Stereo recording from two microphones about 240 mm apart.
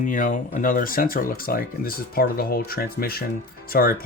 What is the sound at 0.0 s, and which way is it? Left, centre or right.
Speech, left.